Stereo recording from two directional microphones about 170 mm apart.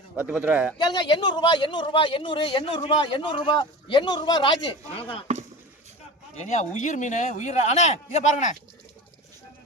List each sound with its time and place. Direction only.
0.2 s speech: 10° right (ahead or behind)
0.8 s a man's voice: 25° left (ahead or behind)
6.3 s speech: 40° left (ahead or behind)